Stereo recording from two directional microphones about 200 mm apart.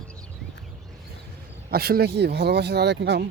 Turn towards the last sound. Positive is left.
turn(degrees=-60)  # may be behind; listen again after turning